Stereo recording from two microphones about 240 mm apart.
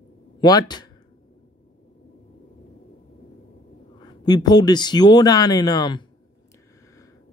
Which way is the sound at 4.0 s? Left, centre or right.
Centre.